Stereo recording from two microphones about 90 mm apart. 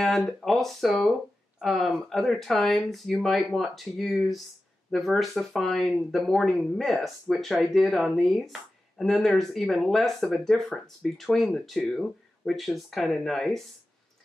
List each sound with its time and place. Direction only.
0.0 s speech: 5° left (ahead or behind)